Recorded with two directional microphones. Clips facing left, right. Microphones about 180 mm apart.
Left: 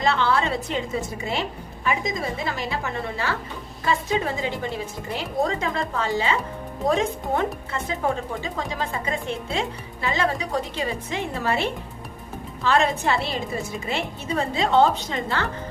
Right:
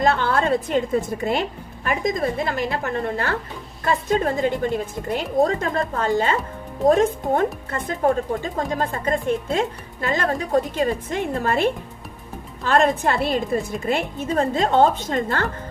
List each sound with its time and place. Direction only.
0.0 s speech: 50° right (ahead or behind)